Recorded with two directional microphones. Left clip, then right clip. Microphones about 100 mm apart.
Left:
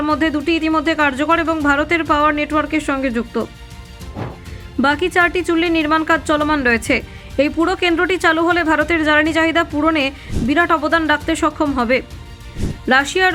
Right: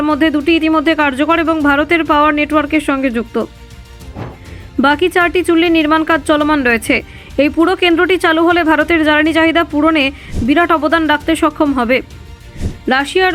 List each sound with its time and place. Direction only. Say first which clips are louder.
0.0 s speech: right 4 dB; 40° right (ahead or behind)
4.8 s speech: right 3 dB; 45° right (ahead or behind)
12.9 s speech: right 1 dB; 30° right (ahead or behind)